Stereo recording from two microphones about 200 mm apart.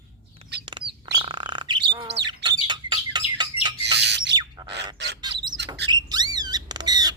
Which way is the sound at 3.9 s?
60° right (ahead or behind).